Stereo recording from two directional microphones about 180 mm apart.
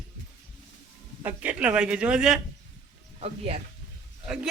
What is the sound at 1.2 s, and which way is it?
A man's voice, 10° right (ahead or behind).